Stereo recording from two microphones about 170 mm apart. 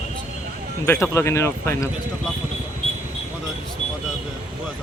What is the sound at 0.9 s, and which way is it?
Speech, 15° left (ahead or behind).